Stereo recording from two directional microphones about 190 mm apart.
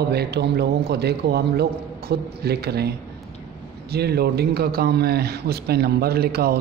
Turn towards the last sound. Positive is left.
turn(degrees=-55)  # may be behind; listen again after turning